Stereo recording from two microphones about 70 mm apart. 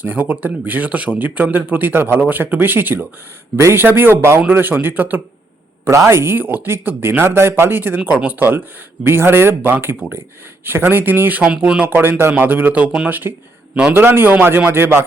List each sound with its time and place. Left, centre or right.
0.0 s a man's voice: right
5.8 s a man's voice: right
11.5 s speech: centre
11.9 s a man's voice: right